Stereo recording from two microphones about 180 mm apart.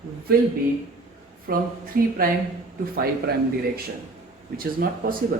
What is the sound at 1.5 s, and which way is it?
Speech, 55° right (ahead or behind).